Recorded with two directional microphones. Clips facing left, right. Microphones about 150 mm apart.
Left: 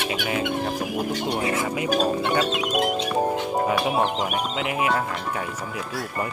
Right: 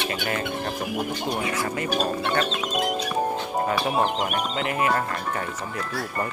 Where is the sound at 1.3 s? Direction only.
25° left (ahead or behind).